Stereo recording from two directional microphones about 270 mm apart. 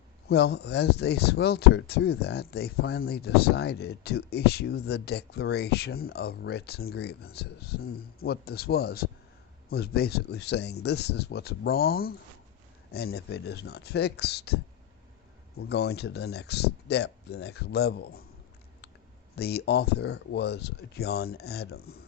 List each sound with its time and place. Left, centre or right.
0.3 s speech: left
19.4 s speech: left